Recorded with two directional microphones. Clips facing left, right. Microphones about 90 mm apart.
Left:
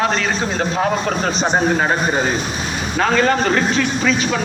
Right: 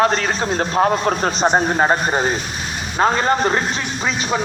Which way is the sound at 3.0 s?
30° right (ahead or behind).